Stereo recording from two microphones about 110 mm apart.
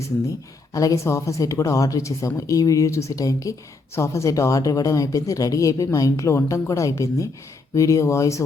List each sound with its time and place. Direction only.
0.0 s speech: 30° left (ahead or behind)